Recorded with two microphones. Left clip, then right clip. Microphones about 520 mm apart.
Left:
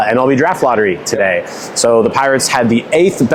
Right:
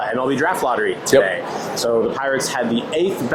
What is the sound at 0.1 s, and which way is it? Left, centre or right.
Speech, left.